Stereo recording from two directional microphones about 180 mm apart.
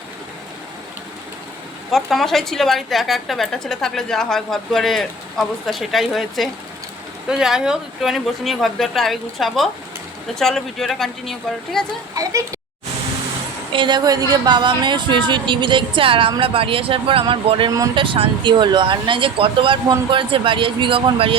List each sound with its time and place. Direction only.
1.9 s a woman's voice: centre (ahead or behind)
12.1 s speech: 20° right (ahead or behind)
13.7 s a woman's voice: 25° right (ahead or behind)